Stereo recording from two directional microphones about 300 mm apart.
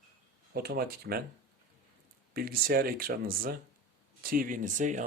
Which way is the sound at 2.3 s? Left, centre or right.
Right.